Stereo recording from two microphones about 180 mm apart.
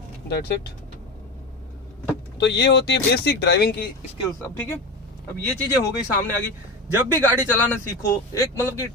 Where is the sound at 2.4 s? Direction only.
75° left (ahead or behind).